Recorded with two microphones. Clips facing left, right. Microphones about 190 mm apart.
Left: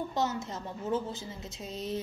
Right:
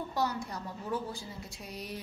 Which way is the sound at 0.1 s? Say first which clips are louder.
Left 1 dB; 20° left (ahead or behind).